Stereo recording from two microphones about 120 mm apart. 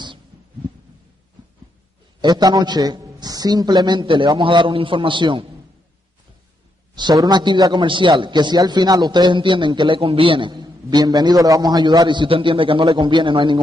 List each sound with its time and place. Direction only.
2.2 s a man's voice: 35° right (ahead or behind)
7.0 s a man's voice: 35° right (ahead or behind)